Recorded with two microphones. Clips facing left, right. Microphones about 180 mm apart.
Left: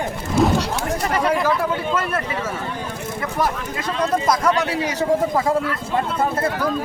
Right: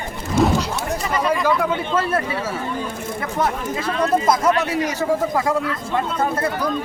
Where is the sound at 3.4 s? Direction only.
25° right (ahead or behind).